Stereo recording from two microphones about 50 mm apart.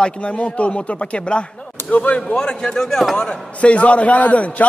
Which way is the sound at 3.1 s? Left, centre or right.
Left.